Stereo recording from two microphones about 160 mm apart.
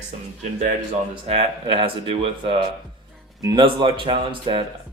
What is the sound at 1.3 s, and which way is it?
Speech, 40° right (ahead or behind).